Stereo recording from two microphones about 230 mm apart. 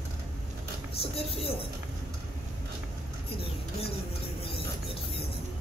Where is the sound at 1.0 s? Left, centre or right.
Left.